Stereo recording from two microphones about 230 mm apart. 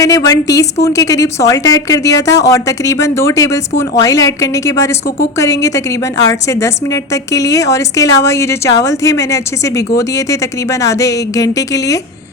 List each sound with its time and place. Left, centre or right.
0.0 s a woman's voice: centre